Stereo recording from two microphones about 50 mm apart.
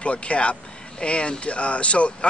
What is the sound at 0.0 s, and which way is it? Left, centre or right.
Speech, left.